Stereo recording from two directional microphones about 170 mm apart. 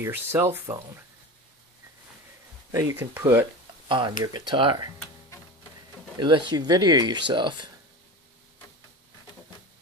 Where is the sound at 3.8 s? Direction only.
30° right (ahead or behind).